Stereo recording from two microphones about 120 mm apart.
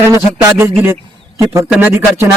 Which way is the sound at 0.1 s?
20° right (ahead or behind).